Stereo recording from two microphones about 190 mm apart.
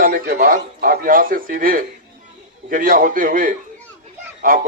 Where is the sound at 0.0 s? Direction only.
50° right (ahead or behind).